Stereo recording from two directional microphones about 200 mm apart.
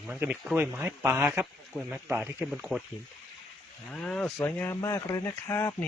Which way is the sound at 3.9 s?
5° left (ahead or behind).